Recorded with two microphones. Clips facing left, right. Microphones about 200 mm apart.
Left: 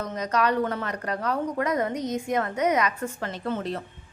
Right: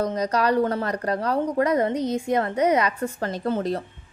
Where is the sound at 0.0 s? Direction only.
35° right (ahead or behind).